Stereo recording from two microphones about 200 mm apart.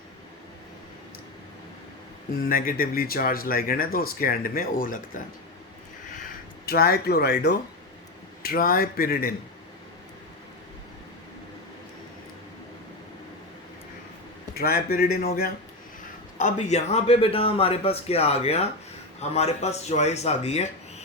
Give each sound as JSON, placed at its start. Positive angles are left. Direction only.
{"t": 2.4, "sound": "speech", "side_deg": 45}
{"t": 6.2, "sound": "speech", "side_deg": 50}
{"t": 14.5, "sound": "speech", "side_deg": 50}
{"t": 16.4, "sound": "a man's voice", "side_deg": 35}